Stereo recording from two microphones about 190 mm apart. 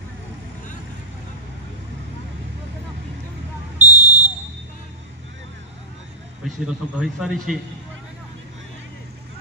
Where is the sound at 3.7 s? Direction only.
10° right (ahead or behind).